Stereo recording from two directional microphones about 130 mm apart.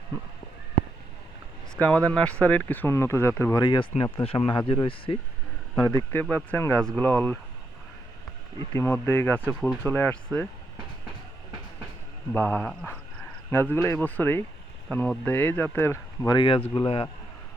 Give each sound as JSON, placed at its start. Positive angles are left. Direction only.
{"t": 1.8, "sound": "speech", "side_deg": 10}
{"t": 3.6, "sound": "speech", "side_deg": 35}
{"t": 5.7, "sound": "speech", "side_deg": 25}
{"t": 8.7, "sound": "speech", "side_deg": 20}
{"t": 12.3, "sound": "speech", "side_deg": 15}
{"t": 16.3, "sound": "a man's voice", "side_deg": 35}